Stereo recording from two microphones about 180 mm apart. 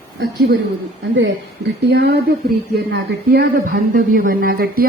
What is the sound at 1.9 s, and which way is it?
Speech, 65° right (ahead or behind).